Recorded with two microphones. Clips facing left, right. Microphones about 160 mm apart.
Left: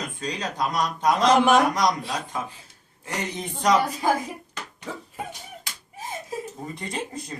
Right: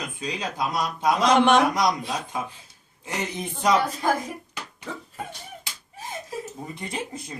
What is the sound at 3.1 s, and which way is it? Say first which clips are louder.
Speech: even; 10° right (ahead or behind).